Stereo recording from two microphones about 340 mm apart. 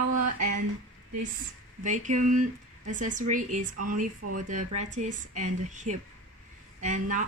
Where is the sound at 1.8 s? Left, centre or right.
Right.